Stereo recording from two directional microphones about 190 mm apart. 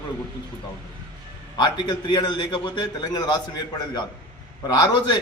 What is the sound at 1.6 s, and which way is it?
A man's voice, 25° left (ahead or behind).